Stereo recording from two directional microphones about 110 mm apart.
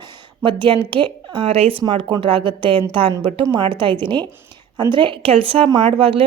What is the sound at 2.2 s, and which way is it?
Speech, 50° right (ahead or behind).